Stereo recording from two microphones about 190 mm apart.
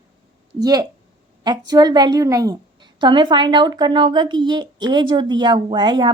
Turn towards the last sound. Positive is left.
turn(degrees=-25)  # may be behind; listen again after turning